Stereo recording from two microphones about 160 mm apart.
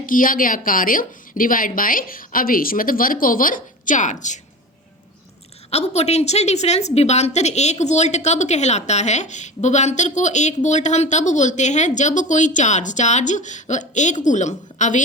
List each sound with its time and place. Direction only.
0.0 s speech: 60° left (ahead or behind)
5.7 s a woman's voice: 40° left (ahead or behind)